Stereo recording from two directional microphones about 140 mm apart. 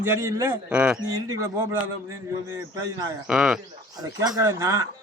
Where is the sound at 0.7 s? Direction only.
5° right (ahead or behind).